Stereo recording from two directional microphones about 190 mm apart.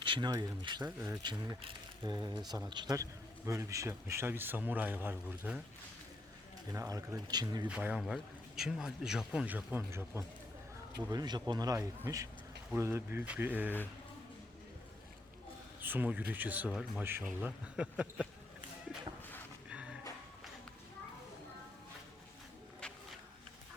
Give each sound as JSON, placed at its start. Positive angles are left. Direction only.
{"t": 0.0, "sound": "speech", "side_deg": -25}
{"t": 6.7, "sound": "speech", "side_deg": -15}
{"t": 7.7, "sound": "speech", "side_deg": -5}
{"t": 15.8, "sound": "speech", "side_deg": -10}
{"t": 19.7, "sound": "a sound", "side_deg": -5}
{"t": 22.8, "sound": "walk", "side_deg": 5}